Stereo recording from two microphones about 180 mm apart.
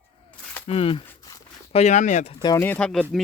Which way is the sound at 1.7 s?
40° left (ahead or behind).